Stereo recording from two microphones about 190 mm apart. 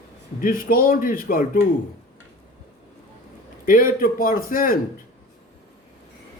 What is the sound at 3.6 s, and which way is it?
A man's voice, 45° left (ahead or behind).